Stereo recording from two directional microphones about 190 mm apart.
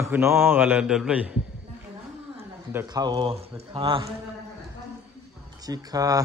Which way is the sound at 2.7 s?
15° right (ahead or behind).